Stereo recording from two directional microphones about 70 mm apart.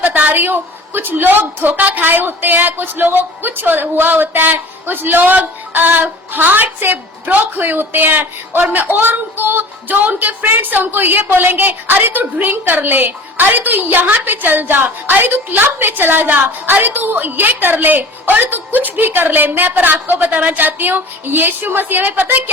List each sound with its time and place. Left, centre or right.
0.0 s a woman's voice: right